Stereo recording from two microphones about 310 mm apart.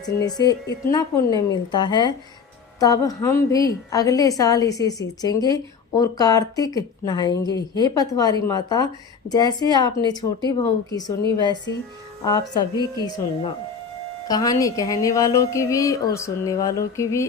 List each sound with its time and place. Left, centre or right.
0.0 s speech: centre
12.2 s speech: centre